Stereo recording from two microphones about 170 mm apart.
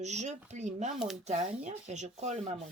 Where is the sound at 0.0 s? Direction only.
40° right (ahead or behind).